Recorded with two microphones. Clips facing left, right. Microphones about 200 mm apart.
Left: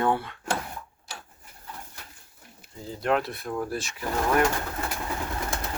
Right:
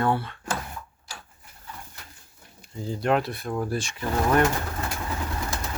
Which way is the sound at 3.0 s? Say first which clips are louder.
Right 1 dB; centre (ahead or behind).